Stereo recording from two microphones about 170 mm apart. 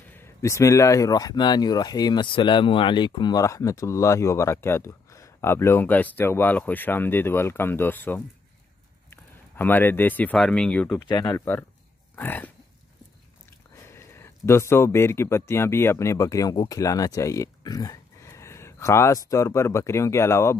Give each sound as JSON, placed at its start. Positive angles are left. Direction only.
{"t": 0.1, "sound": "speech", "side_deg": 15}
{"t": 11.0, "sound": "speech", "side_deg": 25}
{"t": 13.8, "sound": "speech", "side_deg": 15}